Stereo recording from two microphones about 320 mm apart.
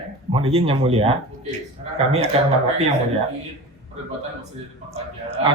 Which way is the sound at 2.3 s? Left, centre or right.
Centre.